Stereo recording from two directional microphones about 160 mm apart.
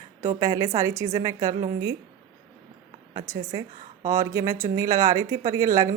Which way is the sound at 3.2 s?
20° right (ahead or behind).